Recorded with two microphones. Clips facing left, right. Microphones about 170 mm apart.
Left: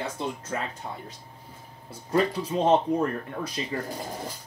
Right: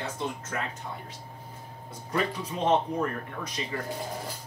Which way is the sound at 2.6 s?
30° left (ahead or behind).